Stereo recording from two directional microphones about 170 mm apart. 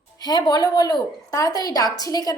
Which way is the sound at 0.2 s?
25° left (ahead or behind).